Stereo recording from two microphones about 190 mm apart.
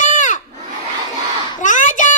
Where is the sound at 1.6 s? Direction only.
40° left (ahead or behind).